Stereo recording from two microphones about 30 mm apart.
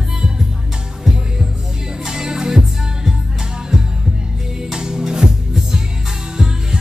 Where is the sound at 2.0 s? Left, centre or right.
Right.